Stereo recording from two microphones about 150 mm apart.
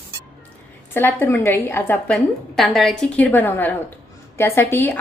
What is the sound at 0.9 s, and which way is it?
A woman's voice, 15° left (ahead or behind).